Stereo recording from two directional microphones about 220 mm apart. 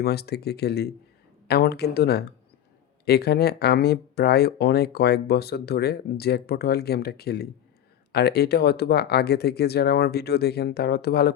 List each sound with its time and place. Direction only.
0.0 s speech: 45° left (ahead or behind)